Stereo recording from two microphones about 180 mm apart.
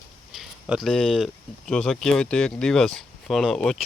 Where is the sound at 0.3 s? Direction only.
Centre (ahead or behind).